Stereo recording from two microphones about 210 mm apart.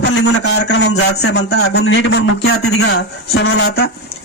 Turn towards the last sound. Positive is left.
turn(degrees=50)  # may be behind; listen again after turning